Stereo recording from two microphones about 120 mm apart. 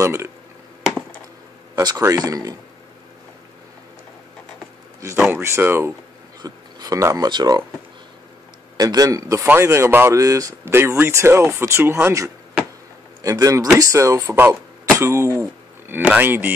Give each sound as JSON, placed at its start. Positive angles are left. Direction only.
{"t": 0.0, "sound": "speech", "side_deg": -25}
{"t": 2.0, "sound": "a man's voice", "side_deg": -25}
{"t": 5.3, "sound": "a man's voice", "side_deg": -20}
{"t": 6.4, "sound": "a sound", "side_deg": -30}
{"t": 7.2, "sound": "speech", "side_deg": -35}
{"t": 8.7, "sound": "a man's voice", "side_deg": -30}
{"t": 14.2, "sound": "speech", "side_deg": -15}
{"t": 15.9, "sound": "speech", "side_deg": -15}